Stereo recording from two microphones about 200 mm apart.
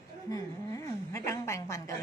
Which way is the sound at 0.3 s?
15° left (ahead or behind).